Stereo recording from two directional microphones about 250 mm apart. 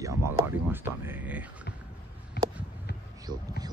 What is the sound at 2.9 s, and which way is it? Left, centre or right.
Basketball bounce, left.